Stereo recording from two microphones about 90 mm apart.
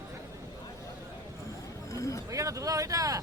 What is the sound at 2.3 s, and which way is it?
Speech, 35° right (ahead or behind).